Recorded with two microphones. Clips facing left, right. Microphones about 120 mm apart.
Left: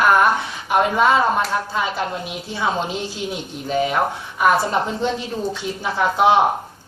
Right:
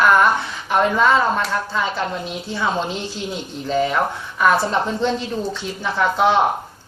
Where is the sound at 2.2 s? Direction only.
15° left (ahead or behind).